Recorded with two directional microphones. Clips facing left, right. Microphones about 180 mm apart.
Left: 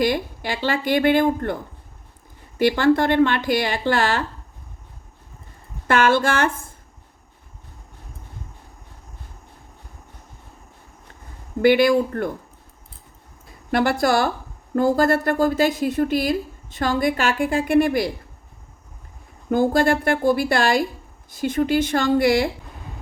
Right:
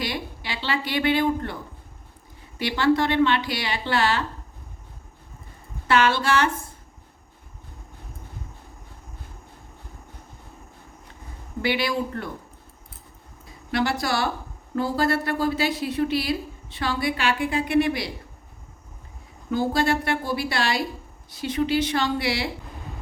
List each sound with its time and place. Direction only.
0.0 s a woman's voice: 50° left (ahead or behind)
2.6 s a woman's voice: 50° left (ahead or behind)
5.9 s a woman's voice: 50° left (ahead or behind)
11.6 s a woman's voice: 50° left (ahead or behind)
13.7 s a woman's voice: 50° left (ahead or behind)
19.5 s a woman's voice: 50° left (ahead or behind)